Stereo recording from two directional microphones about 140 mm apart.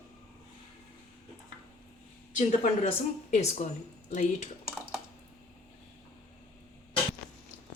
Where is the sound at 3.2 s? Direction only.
50° left (ahead or behind).